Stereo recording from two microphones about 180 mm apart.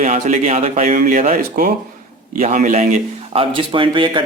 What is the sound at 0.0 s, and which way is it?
Speech, 40° right (ahead or behind).